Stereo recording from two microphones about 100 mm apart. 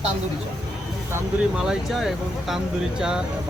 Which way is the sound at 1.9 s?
Centre (ahead or behind).